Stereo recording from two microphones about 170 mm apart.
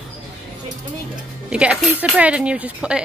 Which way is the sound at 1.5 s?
5° right (ahead or behind).